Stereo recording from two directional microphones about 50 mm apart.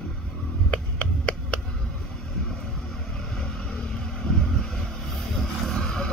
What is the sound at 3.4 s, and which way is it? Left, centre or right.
Vehicle, centre.